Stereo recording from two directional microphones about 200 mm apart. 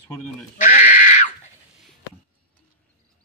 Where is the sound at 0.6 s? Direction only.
40° left (ahead or behind).